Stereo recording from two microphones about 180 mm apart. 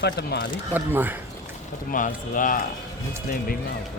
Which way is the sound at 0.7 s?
10° right (ahead or behind).